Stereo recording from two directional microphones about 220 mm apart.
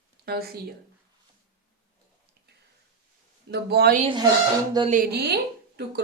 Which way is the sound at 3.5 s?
45° right (ahead or behind).